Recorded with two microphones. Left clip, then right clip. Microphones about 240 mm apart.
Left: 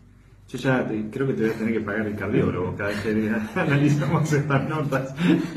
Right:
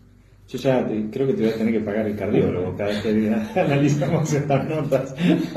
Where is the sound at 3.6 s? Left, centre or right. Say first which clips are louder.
Left 1 dB; right.